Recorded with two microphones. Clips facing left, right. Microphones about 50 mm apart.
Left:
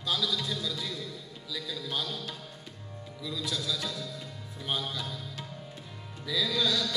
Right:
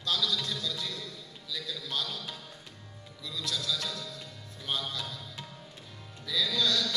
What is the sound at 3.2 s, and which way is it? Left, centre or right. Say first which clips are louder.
Music: left 1 dB; centre.